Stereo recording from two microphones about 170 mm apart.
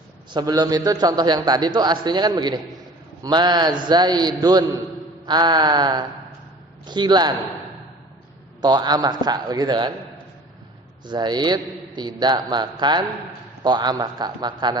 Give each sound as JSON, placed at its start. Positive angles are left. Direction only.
{"t": 0.3, "sound": "a man's voice", "side_deg": -25}
{"t": 8.6, "sound": "a man's voice", "side_deg": -25}
{"t": 11.0, "sound": "a man's voice", "side_deg": -25}